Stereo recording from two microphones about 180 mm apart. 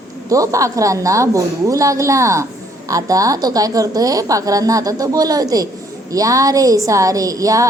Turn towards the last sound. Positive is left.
turn(degrees=-20)  # may be behind; listen again after turning